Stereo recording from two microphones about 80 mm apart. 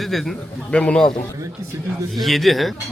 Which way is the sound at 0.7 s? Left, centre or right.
Centre.